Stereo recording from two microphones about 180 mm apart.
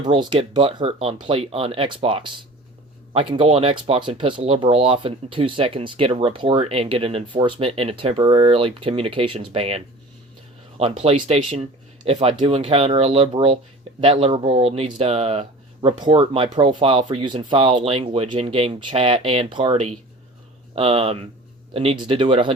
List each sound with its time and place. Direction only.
0.0 s speech: 25° right (ahead or behind)